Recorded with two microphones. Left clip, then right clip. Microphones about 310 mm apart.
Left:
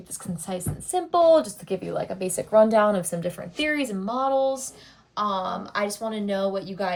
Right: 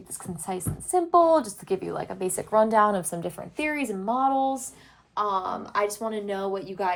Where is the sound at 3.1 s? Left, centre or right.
Centre.